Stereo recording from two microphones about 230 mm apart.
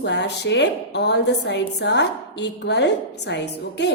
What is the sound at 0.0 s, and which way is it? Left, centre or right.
A woman's voice, left.